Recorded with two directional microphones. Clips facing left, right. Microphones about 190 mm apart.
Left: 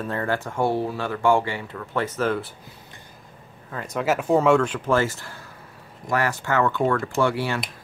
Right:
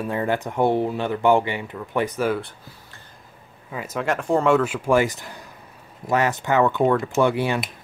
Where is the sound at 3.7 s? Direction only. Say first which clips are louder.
Left 1 dB; 5° right (ahead or behind).